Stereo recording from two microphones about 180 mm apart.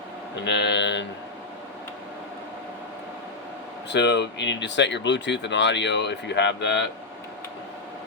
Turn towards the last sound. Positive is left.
turn(degrees=70)  # may be behind; listen again after turning